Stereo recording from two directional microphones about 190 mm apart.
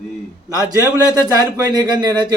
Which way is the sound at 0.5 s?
20° right (ahead or behind).